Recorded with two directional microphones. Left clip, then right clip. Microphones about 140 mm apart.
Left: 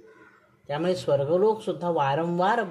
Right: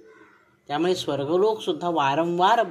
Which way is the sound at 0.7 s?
15° right (ahead or behind).